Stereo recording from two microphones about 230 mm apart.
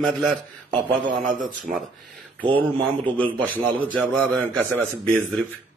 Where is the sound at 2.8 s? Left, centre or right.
Centre.